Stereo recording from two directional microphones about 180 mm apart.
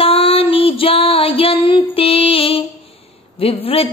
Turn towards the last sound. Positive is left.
turn(degrees=30)  # may be behind; listen again after turning